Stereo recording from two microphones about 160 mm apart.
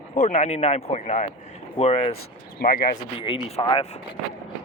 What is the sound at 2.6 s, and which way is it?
Speech, 70° left (ahead or behind).